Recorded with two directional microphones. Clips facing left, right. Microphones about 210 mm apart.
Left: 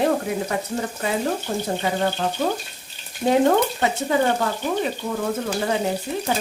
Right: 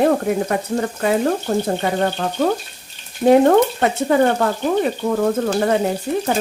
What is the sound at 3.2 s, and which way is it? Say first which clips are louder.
Frying: right 8 dB; 90° right.